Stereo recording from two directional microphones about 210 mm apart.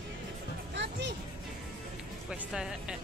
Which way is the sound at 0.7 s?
55° right (ahead or behind).